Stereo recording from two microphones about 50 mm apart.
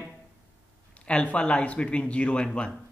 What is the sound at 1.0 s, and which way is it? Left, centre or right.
Speech, left.